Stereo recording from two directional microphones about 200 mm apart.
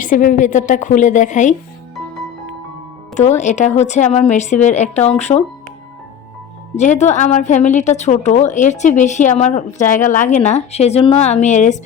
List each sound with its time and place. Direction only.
0.0 s speech: 40° left (ahead or behind)
3.2 s speech: 35° left (ahead or behind)
6.7 s speech: 35° left (ahead or behind)